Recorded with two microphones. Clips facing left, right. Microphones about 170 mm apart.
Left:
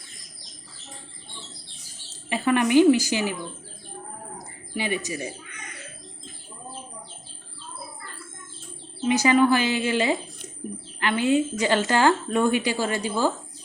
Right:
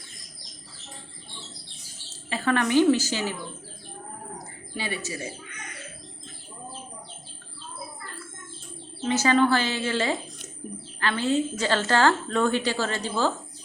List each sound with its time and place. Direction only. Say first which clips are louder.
2.3 s a woman's voice: left 3 dB; 15° left (ahead or behind)
4.8 s a woman's voice: left 4 dB; 15° left (ahead or behind)
9.0 s a woman's voice: left 2 dB; 15° left (ahead or behind)